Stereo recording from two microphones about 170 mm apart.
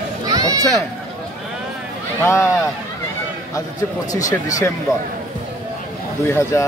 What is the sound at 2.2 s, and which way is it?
Speech, 15° left (ahead or behind).